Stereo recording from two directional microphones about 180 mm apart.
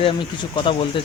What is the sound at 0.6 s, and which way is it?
Speech, 30° left (ahead or behind).